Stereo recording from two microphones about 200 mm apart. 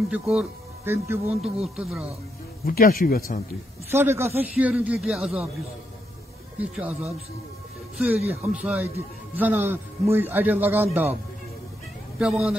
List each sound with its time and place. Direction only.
0.1 s speech: 5° right (ahead or behind)
2.6 s speech: 45° left (ahead or behind)
3.9 s a man's voice: 10° right (ahead or behind)
6.6 s speech: 5° right (ahead or behind)
8.3 s a man's voice: 10° right (ahead or behind)
12.2 s speech: 5° right (ahead or behind)